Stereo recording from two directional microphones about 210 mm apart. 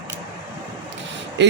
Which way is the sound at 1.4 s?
55° right (ahead or behind).